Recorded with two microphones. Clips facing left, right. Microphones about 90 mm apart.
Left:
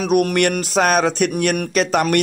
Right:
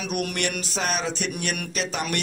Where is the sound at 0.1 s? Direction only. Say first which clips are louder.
Left 12 dB; 55° left (ahead or behind).